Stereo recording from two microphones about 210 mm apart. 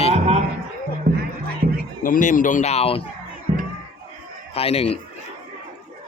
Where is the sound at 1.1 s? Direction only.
45° right (ahead or behind).